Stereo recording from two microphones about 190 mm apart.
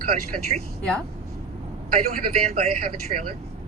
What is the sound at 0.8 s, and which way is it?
Speech, 5° left (ahead or behind).